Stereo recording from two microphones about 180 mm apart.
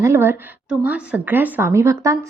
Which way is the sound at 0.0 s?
15° right (ahead or behind).